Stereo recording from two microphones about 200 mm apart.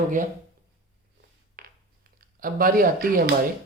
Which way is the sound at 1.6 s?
50° right (ahead or behind).